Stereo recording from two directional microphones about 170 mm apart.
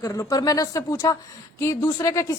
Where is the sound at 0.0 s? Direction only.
20° left (ahead or behind).